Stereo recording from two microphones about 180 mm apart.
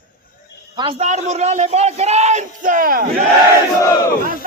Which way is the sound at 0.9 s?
40° right (ahead or behind).